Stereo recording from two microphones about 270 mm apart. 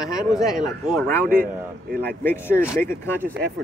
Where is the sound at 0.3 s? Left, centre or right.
Centre.